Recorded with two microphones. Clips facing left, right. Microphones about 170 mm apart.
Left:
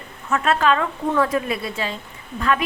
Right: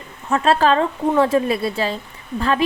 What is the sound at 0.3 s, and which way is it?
A woman's voice, 30° right (ahead or behind).